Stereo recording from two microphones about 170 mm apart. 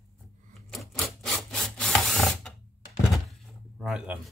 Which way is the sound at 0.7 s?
Centre (ahead or behind).